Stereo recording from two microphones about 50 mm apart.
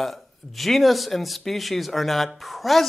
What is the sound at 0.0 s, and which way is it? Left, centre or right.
Speech, centre.